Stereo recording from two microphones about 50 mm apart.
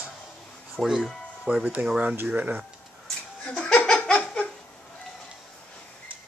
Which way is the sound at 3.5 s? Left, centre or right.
Left.